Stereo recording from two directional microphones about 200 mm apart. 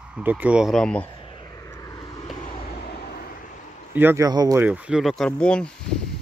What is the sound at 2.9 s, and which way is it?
Vehicle, 50° left (ahead or behind).